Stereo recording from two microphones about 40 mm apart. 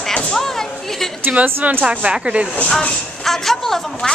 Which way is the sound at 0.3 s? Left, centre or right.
Centre.